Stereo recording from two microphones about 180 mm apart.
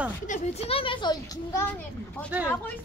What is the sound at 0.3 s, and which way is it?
Speech, 35° left (ahead or behind).